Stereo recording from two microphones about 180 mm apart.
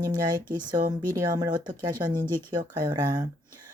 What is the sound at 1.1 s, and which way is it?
Speech, 20° right (ahead or behind).